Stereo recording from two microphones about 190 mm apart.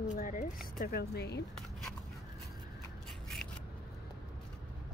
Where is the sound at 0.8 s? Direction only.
55° left (ahead or behind).